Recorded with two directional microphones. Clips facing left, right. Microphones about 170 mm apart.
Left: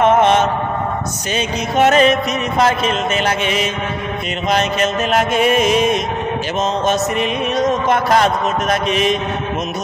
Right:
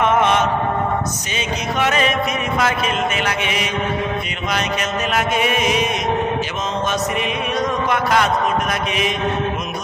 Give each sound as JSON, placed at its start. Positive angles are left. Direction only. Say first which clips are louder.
{"t": 0.0, "sound": "mantra", "louder": "left 4 dB", "side_deg": 30}
{"t": 1.8, "sound": "music", "louder": "left 8 dB", "side_deg": 45}
{"t": 5.3, "sound": "music", "louder": "left 6 dB", "side_deg": -10}
{"t": 6.9, "sound": "mantra", "louder": "left 4 dB", "side_deg": 30}
{"t": 7.6, "sound": "speech", "louder": "left 5 dB", "side_deg": 40}